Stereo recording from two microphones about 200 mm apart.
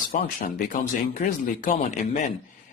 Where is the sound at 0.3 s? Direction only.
45° left (ahead or behind).